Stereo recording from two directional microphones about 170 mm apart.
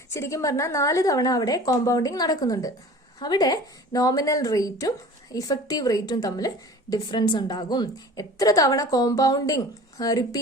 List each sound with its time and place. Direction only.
0.1 s a woman's voice: 15° left (ahead or behind)